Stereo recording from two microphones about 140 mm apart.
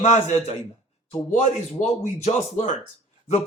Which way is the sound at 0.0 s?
55° left (ahead or behind).